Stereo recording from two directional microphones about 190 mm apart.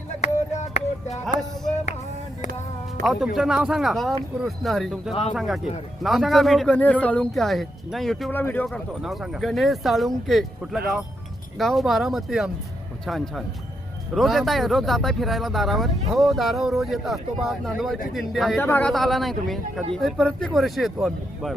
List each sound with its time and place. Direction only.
0.2 s music: 35° left (ahead or behind)
3.0 s speech: centre (ahead or behind)